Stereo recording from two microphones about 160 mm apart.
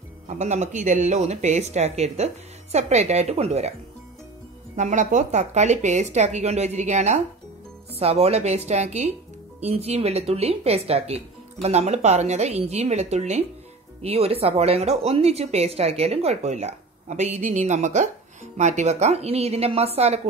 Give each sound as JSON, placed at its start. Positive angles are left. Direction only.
{"t": 0.3, "sound": "speech", "side_deg": -45}
{"t": 4.7, "sound": "speech", "side_deg": -50}